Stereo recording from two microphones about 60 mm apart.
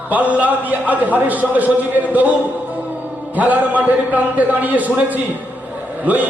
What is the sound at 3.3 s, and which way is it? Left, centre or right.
A man's voice, right.